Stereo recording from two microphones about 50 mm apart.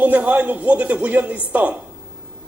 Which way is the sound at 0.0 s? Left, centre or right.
Right.